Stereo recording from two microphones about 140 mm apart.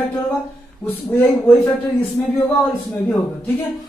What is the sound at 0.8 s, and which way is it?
Speech, 15° left (ahead or behind).